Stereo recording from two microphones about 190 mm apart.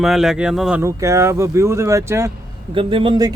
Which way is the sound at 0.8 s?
15° right (ahead or behind).